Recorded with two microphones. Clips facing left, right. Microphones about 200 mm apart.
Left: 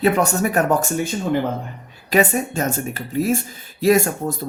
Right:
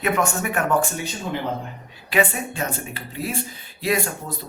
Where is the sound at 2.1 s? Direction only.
45° left (ahead or behind).